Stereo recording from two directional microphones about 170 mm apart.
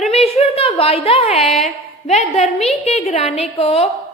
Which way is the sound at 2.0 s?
40° left (ahead or behind).